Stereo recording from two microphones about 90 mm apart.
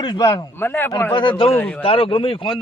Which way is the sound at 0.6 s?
25° left (ahead or behind).